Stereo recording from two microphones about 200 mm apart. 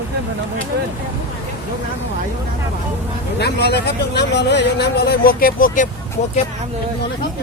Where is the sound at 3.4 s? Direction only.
55° left (ahead or behind).